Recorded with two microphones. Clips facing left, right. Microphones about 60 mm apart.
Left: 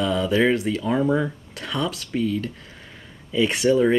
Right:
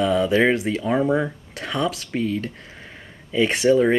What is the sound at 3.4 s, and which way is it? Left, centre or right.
Speech, centre.